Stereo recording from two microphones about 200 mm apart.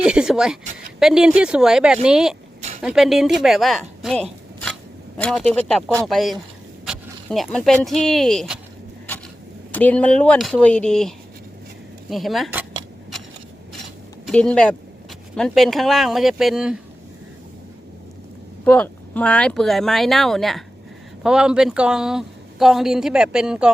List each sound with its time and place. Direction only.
0.0 s a sound: 5° right (ahead or behind)
0.9 s a man's voice: centre (ahead or behind)
9.7 s speech: 5° left (ahead or behind)
12.1 s a sound: centre (ahead or behind)
14.3 s speech: 5° left (ahead or behind)
18.6 s speech: 5° left (ahead or behind)